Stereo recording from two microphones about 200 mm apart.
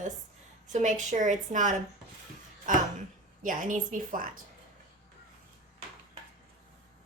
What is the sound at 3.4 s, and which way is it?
A woman's voice, 40° right (ahead or behind).